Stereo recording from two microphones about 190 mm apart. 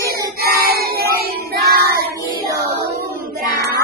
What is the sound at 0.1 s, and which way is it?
Child singing, 55° right (ahead or behind).